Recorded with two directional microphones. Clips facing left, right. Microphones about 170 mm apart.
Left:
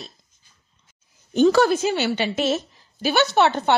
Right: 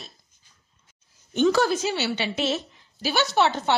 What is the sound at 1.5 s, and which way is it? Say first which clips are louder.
A woman's voice: left 4 dB; 55° left (ahead or behind).